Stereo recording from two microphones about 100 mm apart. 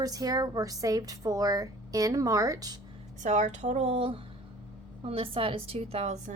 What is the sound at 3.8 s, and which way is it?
Speech, 75° right (ahead or behind).